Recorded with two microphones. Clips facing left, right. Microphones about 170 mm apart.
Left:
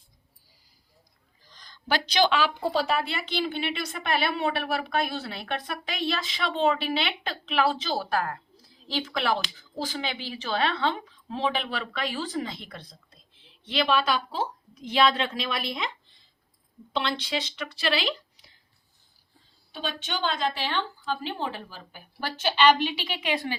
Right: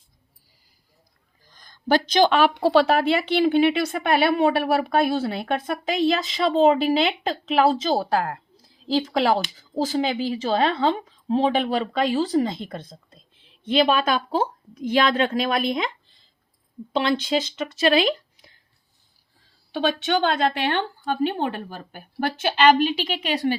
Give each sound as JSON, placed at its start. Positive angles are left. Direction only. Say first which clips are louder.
{"t": 1.5, "sound": "speech", "louder": "right 8 dB", "side_deg": -50}
{"t": 8.9, "sound": "speech", "louder": "right 7 dB", "side_deg": -40}
{"t": 16.9, "sound": "speech", "louder": "right 7 dB", "side_deg": -45}
{"t": 19.7, "sound": "a woman's voice", "louder": "right 11 dB", "side_deg": -65}